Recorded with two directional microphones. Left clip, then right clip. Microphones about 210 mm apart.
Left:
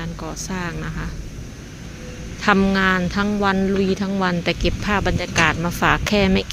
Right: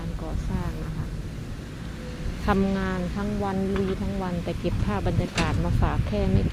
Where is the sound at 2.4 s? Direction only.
15° left (ahead or behind).